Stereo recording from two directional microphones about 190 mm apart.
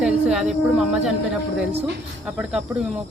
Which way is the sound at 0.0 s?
5° right (ahead or behind).